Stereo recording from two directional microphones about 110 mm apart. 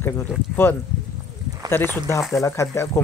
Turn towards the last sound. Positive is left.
turn(degrees=25)  # may be behind; listen again after turning